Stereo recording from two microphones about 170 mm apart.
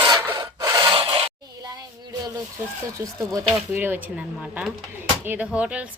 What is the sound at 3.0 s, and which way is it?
Speech, 10° right (ahead or behind).